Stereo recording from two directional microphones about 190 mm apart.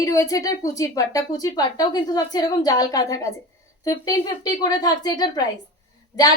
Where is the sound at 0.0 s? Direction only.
20° left (ahead or behind).